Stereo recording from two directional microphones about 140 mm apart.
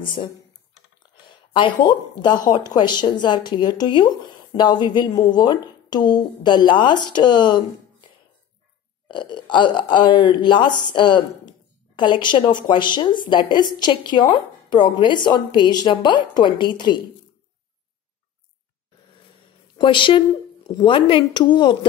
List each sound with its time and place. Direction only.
0.0 s speech: 35° left (ahead or behind)
9.0 s speech: 35° left (ahead or behind)
19.8 s speech: 35° left (ahead or behind)